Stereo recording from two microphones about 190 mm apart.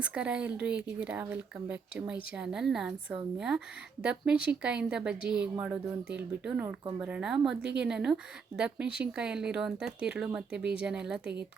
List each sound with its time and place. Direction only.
0.0 s speech: 5° right (ahead or behind)
7.6 s speech: 65° right (ahead or behind)
7.9 s speech: 5° right (ahead or behind)